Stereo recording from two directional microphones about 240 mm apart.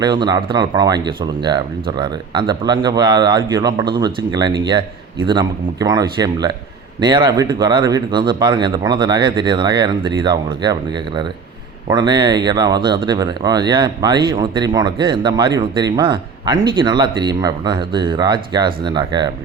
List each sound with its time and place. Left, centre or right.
0.0 s speech: centre